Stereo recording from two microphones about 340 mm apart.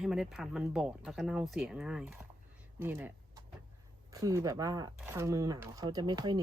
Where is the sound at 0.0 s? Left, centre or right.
Centre.